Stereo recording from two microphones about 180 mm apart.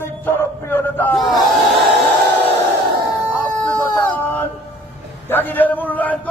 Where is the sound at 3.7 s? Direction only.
10° left (ahead or behind).